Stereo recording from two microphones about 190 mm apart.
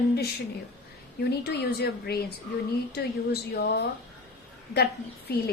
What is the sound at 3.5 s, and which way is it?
Speech, 60° left (ahead or behind).